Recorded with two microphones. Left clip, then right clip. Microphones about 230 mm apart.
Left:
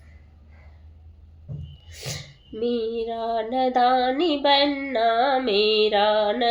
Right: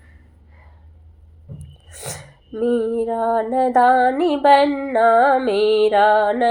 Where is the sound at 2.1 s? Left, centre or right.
Centre.